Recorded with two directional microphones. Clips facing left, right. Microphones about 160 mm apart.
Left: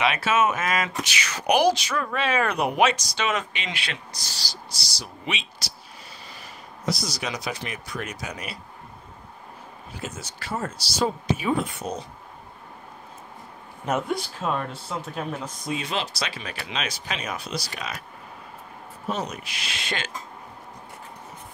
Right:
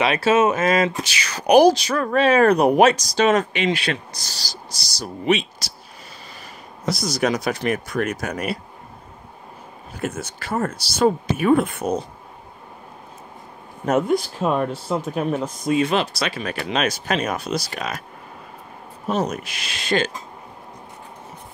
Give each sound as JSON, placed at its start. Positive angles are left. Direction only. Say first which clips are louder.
{"t": 0.0, "sound": "speech", "louder": "right 5 dB", "side_deg": -35}
{"t": 6.9, "sound": "speech", "louder": "right 8 dB", "side_deg": -50}
{"t": 9.9, "sound": "speech", "louder": "right 9 dB", "side_deg": -55}
{"t": 14.4, "sound": "speech", "louder": "right 7 dB", "side_deg": -55}
{"t": 19.0, "sound": "speech", "louder": "right 7 dB", "side_deg": -45}